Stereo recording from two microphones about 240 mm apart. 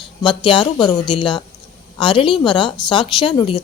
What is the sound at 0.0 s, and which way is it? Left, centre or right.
A woman's voice, centre.